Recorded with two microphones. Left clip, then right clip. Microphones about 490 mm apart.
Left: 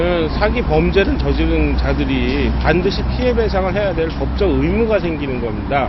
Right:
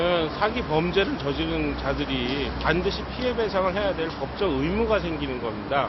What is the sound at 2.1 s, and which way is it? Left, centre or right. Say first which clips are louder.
Speech: left 8 dB; left.